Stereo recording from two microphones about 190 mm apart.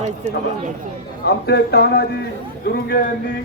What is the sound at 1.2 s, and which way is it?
Speech, 60° left (ahead or behind).